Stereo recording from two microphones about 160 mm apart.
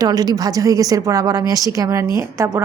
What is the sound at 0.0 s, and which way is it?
A woman's voice, 25° right (ahead or behind).